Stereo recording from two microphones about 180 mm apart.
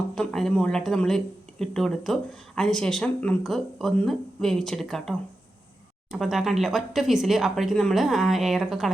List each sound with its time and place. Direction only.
0.2 s speech: centre (ahead or behind)